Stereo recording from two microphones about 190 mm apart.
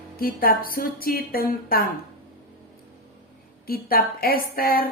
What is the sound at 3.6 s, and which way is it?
A woman's voice, 50° left (ahead or behind).